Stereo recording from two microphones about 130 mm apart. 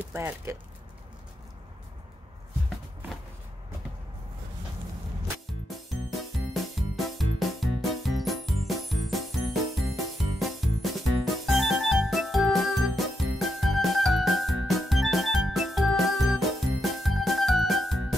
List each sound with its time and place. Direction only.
0.1 s speech: 15° right (ahead or behind)
6.3 s music: centre (ahead or behind)